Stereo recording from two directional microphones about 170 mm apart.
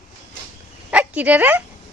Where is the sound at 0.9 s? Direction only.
5° right (ahead or behind).